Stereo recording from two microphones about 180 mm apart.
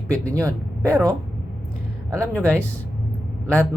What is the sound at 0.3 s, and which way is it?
Speech, 15° right (ahead or behind).